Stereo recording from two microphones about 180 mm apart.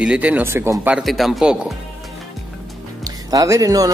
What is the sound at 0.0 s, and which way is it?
Speech, 5° right (ahead or behind).